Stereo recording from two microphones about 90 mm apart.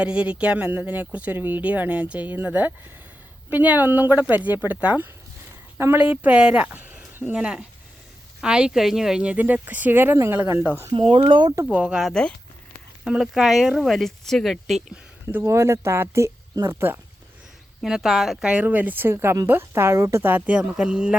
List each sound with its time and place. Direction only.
0.0 s speech: 10° right (ahead or behind)
10.9 s speech: 70° right (ahead or behind)
11.7 s speech: 10° right (ahead or behind)
15.3 s speech: 30° right (ahead or behind)
17.8 s speech: 5° right (ahead or behind); by 20.4 s 25° right (ahead or behind)
20.5 s speech: 10° right (ahead or behind)